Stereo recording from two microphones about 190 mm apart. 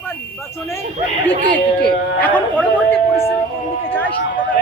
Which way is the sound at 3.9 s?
10° left (ahead or behind).